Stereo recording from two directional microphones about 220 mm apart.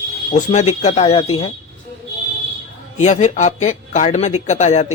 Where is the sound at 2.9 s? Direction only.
30° left (ahead or behind).